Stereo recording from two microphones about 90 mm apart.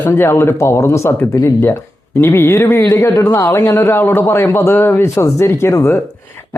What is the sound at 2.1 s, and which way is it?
A man's voice, 25° left (ahead or behind).